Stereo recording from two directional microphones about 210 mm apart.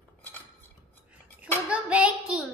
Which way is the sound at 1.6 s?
5° right (ahead or behind).